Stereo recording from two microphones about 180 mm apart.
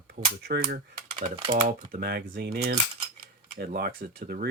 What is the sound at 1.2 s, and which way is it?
Speech, 40° right (ahead or behind).